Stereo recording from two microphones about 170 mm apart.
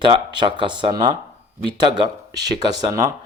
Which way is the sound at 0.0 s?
30° right (ahead or behind).